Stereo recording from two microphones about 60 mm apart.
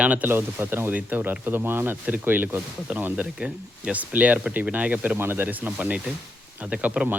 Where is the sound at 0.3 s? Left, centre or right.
Right.